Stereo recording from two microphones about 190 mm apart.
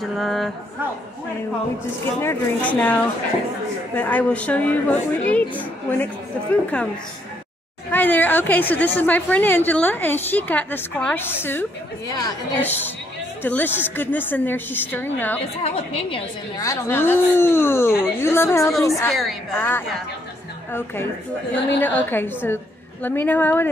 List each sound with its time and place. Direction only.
0.0 s a woman's voice: centre (ahead or behind)
2.2 s a woman's voice: 5° left (ahead or behind)
7.9 s a woman's voice: 10° left (ahead or behind)
15.6 s a woman's voice: 30° left (ahead or behind)
16.6 s a woman's voice: 15° left (ahead or behind)
19.0 s a woman's voice: centre (ahead or behind)